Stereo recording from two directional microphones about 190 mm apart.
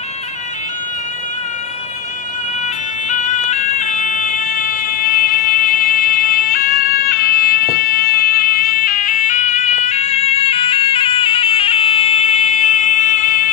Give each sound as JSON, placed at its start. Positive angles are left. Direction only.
{"t": 3.1, "sound": "siren", "side_deg": 40}